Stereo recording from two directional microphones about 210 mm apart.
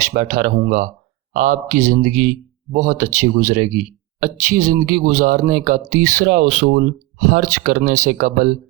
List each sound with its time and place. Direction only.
0.1 s speech: 40° right (ahead or behind)